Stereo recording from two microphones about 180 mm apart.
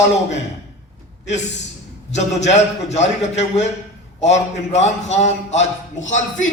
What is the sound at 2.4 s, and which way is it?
A man's voice, 40° left (ahead or behind).